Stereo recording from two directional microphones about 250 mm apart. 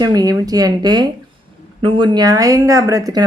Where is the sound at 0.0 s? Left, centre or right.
Centre.